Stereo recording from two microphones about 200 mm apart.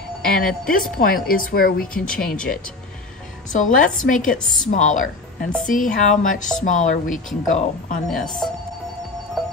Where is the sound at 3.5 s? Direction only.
40° left (ahead or behind).